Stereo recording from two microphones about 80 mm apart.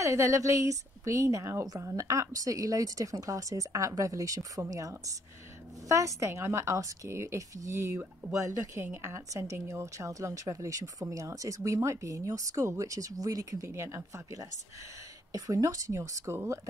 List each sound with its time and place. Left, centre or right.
0.0 s a woman's voice: right